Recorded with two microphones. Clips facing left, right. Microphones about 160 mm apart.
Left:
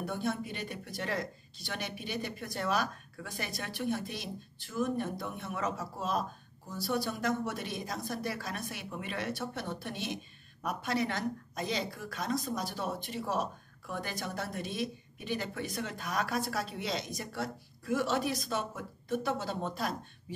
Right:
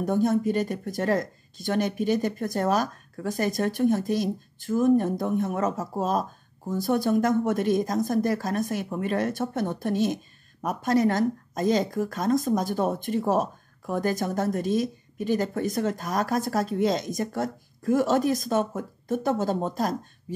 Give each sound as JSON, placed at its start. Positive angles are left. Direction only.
{"t": 0.0, "sound": "speech", "side_deg": -45}